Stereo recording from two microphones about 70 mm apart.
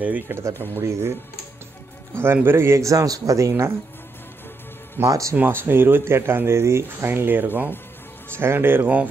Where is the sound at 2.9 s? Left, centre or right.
Right.